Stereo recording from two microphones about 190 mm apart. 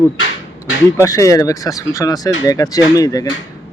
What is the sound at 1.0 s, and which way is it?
Speech, 15° left (ahead or behind).